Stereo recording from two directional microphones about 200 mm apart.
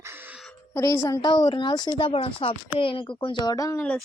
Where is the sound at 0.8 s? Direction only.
15° left (ahead or behind).